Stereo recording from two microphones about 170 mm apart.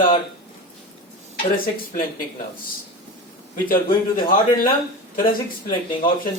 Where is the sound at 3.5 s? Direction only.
55° left (ahead or behind).